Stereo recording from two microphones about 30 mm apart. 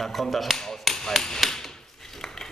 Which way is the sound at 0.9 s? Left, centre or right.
Centre.